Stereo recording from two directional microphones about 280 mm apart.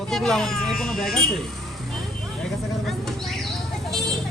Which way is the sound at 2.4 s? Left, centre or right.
Centre.